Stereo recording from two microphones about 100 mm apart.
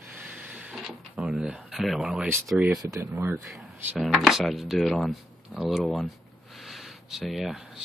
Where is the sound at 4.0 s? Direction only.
Centre (ahead or behind).